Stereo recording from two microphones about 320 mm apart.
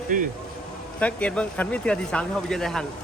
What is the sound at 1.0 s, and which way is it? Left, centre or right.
Speech, centre.